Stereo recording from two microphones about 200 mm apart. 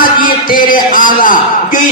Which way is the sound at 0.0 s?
45° left (ahead or behind).